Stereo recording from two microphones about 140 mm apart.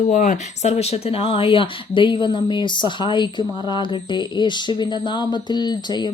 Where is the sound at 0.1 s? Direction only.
65° left (ahead or behind).